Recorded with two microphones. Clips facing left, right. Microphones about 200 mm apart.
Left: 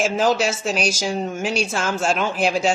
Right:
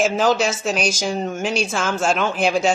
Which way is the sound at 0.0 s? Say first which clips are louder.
Right 1 dB; 5° left (ahead or behind).